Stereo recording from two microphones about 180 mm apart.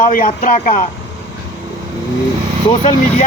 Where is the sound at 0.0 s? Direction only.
50° left (ahead or behind).